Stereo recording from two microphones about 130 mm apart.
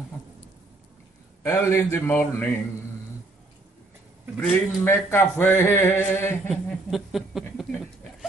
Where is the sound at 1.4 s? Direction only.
20° left (ahead or behind).